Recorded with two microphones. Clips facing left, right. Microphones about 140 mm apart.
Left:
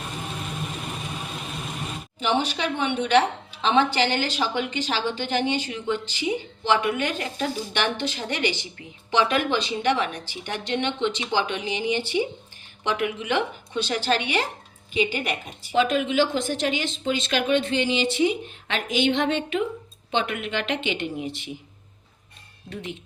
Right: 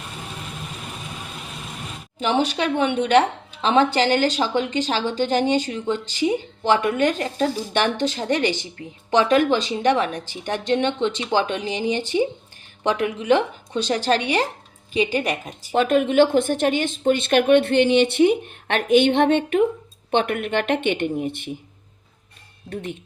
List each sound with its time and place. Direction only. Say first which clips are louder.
2.6 s a woman's voice: right 5 dB; 45° right (ahead or behind)
15.7 s speech: right 4 dB; 55° right (ahead or behind)
22.7 s a woman's voice: right 4 dB; 50° right (ahead or behind)